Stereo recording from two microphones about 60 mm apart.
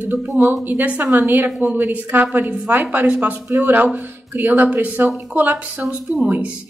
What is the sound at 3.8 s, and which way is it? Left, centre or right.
A woman's voice, right.